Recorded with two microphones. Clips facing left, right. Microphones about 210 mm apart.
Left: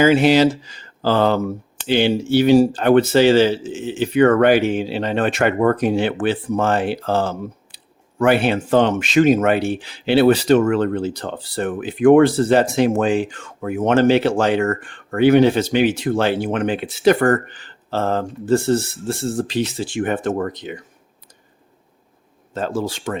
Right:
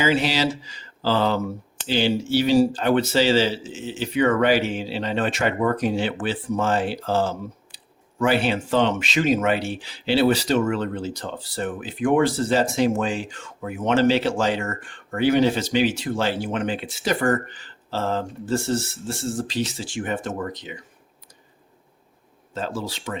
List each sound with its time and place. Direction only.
0.0 s mantra: 50° left (ahead or behind)
1.9 s speech: 60° left (ahead or behind)
22.5 s mantra: 50° left (ahead or behind)